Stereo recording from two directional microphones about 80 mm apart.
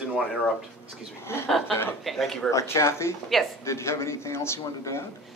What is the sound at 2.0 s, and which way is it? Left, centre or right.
Speech, centre.